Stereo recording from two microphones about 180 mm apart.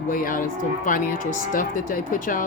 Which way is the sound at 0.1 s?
50° left (ahead or behind).